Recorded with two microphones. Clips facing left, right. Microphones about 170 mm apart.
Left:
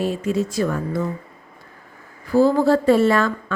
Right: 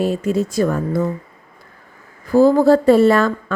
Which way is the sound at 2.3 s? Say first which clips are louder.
Right 4 dB; 45° right (ahead or behind).